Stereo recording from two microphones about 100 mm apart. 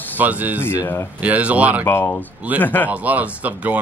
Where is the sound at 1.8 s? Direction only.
25° left (ahead or behind).